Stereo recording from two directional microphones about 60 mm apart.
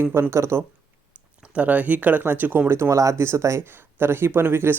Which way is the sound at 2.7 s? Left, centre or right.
Right.